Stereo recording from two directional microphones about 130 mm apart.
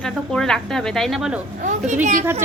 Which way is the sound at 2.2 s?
20° right (ahead or behind).